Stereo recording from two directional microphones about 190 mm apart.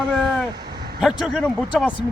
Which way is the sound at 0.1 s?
Centre (ahead or behind).